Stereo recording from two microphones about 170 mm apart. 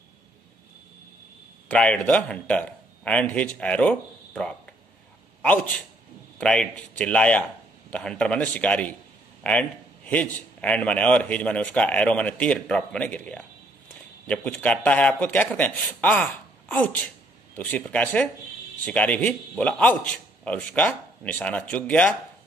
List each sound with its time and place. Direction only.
1.7 s a man's voice: 5° left (ahead or behind)